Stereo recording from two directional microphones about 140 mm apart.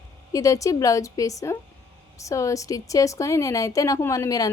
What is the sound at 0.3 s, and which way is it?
Speech, 25° left (ahead or behind).